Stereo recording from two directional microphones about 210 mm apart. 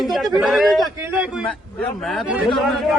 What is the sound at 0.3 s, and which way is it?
A man's voice, centre (ahead or behind).